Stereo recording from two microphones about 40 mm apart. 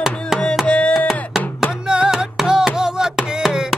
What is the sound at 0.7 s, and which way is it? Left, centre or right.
Chopping, left.